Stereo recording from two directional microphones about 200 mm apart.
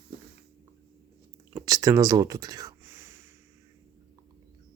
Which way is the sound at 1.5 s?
20° right (ahead or behind).